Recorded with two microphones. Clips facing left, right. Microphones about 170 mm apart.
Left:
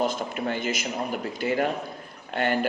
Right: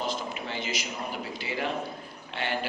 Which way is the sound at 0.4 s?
50° left (ahead or behind).